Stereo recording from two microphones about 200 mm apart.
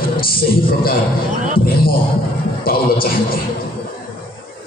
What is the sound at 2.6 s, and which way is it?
Speech, 45° left (ahead or behind).